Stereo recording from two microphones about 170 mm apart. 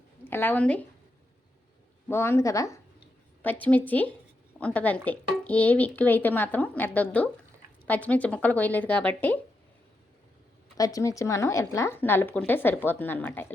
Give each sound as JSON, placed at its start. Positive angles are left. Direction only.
{"t": 0.3, "sound": "speech", "side_deg": 10}
{"t": 2.0, "sound": "speech", "side_deg": 15}
{"t": 10.8, "sound": "speech", "side_deg": 20}